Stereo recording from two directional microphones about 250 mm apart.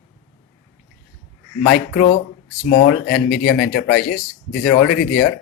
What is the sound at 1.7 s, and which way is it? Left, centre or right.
Speech, left.